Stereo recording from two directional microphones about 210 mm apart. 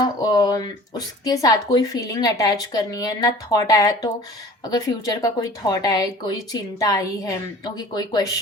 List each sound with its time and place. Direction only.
0.0 s speech: 20° left (ahead or behind)